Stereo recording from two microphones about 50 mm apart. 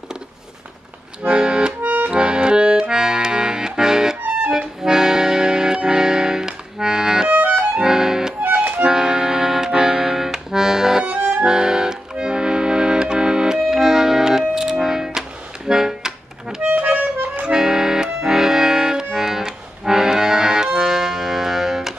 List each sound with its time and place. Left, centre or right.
1.3 s accordion: centre
1.8 s accordion: right
2.0 s accordion: centre
4.5 s music: centre
7.2 s music: right
7.8 s music: centre
8.4 s accordion: right
8.8 s accordion: centre
11.1 s accordion: right
11.4 s music: centre
13.6 s organ: centre
14.5 s music: centre
16.8 s accordion: right
17.4 s accordion: centre